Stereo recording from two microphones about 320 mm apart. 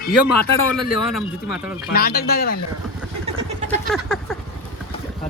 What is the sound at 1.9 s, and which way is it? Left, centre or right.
Speech, left.